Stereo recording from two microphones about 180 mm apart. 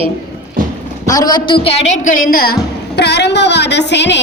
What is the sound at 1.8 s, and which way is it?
Speech, 90° left.